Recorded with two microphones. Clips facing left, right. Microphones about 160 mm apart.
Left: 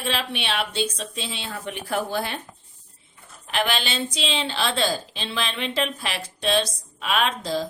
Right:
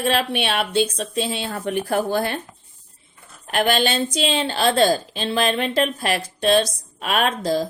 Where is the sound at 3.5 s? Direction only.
50° right (ahead or behind).